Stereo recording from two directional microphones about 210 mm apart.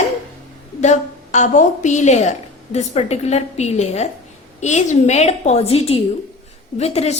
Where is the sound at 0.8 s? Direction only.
35° left (ahead or behind).